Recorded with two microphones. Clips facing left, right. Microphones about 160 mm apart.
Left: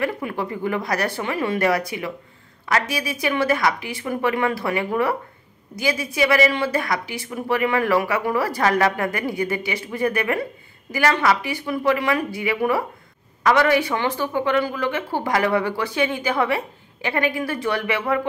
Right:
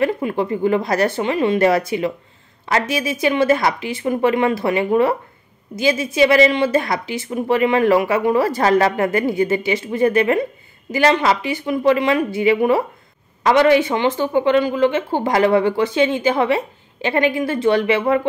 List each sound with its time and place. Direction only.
0.0 s speech: 25° right (ahead or behind)